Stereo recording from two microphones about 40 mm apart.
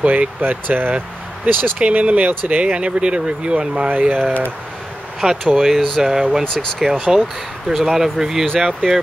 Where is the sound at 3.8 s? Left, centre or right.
Right.